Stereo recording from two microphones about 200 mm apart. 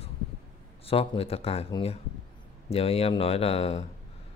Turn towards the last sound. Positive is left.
turn(degrees=30)  # may be behind; listen again after turning